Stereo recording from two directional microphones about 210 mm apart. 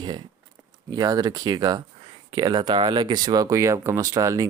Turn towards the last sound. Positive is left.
turn(degrees=-15)  # may be behind; listen again after turning